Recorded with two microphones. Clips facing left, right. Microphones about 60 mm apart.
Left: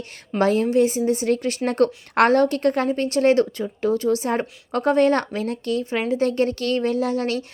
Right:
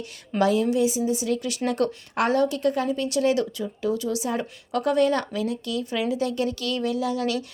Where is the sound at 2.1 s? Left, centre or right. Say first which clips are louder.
Left 5 dB; left.